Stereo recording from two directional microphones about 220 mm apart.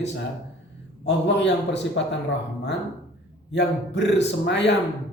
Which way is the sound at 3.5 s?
55° left (ahead or behind).